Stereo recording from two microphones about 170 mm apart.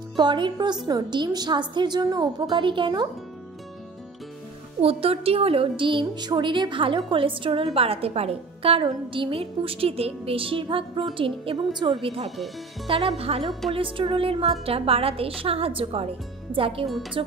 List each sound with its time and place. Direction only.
0.2 s a woman's voice: 25° right (ahead or behind)
4.8 s a woman's voice: 35° right (ahead or behind)